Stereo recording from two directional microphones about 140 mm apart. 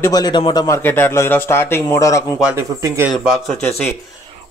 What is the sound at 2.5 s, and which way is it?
Speech, 20° right (ahead or behind).